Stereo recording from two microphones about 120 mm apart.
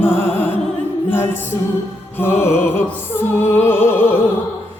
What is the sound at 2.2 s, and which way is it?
Music, 20° left (ahead or behind).